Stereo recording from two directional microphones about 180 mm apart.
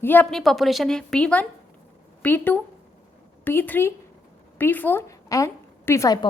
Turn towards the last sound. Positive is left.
turn(degrees=20)  # may be behind; listen again after turning